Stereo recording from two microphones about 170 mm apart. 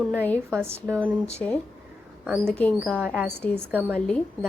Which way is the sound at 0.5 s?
15° right (ahead or behind).